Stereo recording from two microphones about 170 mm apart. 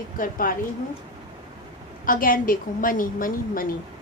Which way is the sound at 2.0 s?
55° left (ahead or behind).